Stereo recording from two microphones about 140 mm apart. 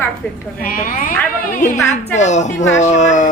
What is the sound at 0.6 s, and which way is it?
Speech, 80° left.